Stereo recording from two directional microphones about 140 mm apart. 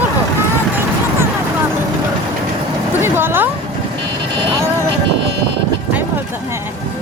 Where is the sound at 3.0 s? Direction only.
15° right (ahead or behind).